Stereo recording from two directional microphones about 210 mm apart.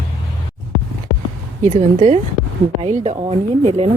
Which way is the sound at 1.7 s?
35° right (ahead or behind).